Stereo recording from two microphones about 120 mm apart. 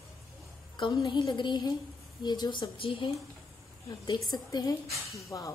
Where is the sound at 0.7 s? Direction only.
35° left (ahead or behind).